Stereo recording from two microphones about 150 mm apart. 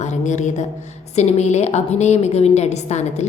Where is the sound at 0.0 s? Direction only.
50° left (ahead or behind).